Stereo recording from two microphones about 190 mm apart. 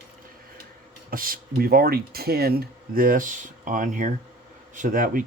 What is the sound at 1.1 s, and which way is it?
Speech, 50° right (ahead or behind).